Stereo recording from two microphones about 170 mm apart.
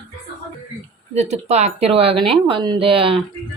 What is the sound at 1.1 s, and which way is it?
A man's voice, 40° right (ahead or behind).